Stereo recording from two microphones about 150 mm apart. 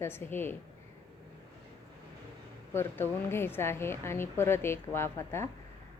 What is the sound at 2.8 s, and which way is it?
A woman's voice, 15° left (ahead or behind).